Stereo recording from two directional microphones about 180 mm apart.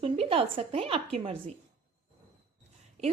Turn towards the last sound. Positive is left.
turn(degrees=-35)  # may be behind; listen again after turning